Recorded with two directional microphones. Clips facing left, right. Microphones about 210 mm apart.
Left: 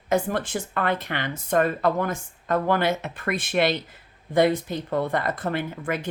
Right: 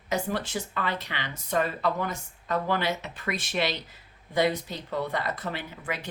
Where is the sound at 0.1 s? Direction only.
50° left (ahead or behind).